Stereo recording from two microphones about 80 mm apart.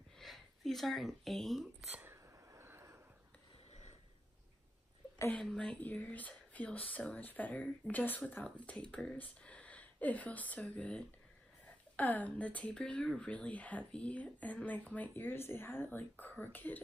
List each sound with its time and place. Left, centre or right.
0.2 s speech: centre
2.0 s a sound: right
5.4 s speech: centre